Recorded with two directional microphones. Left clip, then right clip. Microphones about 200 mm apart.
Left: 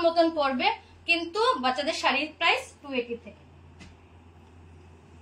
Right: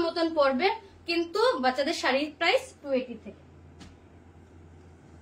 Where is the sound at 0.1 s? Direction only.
20° right (ahead or behind).